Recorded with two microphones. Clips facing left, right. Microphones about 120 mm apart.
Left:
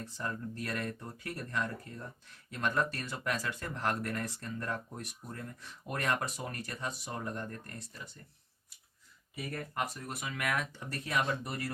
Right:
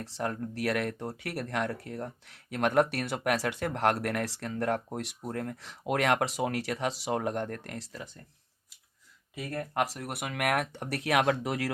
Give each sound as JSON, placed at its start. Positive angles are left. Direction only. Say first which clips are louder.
{"t": 0.0, "sound": "speech", "louder": "right 5 dB", "side_deg": -75}
{"t": 9.3, "sound": "speech", "louder": "right 5 dB", "side_deg": -80}